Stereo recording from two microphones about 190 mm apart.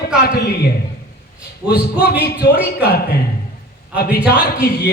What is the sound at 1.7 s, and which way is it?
Speech, 55° left (ahead or behind).